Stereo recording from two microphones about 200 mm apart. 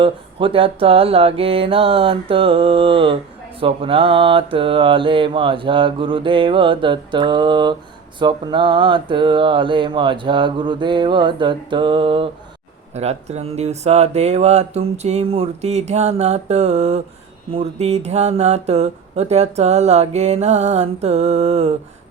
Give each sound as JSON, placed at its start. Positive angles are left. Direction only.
{"t": 0.0, "sound": "mantra", "side_deg": -25}